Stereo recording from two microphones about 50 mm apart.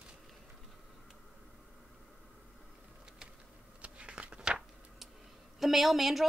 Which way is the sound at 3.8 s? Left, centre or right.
Right.